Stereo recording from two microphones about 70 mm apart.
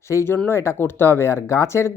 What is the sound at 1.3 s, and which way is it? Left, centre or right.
Speech, left.